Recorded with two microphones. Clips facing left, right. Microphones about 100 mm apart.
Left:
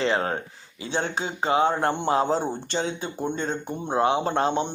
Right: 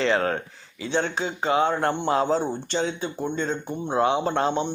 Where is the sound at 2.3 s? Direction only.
40° left (ahead or behind).